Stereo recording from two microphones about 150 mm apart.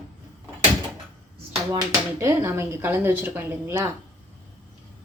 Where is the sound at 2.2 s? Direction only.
15° right (ahead or behind).